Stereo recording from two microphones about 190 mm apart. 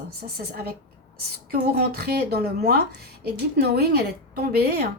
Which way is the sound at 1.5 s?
55° right (ahead or behind).